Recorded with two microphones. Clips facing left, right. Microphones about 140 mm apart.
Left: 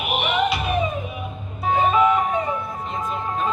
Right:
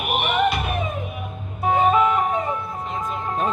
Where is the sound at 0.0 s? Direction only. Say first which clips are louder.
Right 1 dB; 50° right (ahead or behind).